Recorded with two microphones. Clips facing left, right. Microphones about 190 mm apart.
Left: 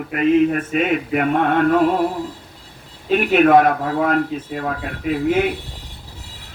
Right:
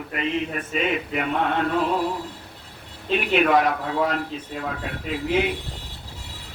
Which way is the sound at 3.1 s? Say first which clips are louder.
Left 6 dB; 50° left (ahead or behind).